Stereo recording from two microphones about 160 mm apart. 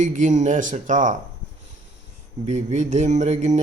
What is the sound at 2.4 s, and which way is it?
Speech, 45° right (ahead or behind).